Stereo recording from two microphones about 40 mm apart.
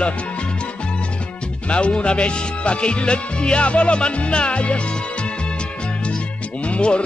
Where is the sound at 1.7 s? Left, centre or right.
Left.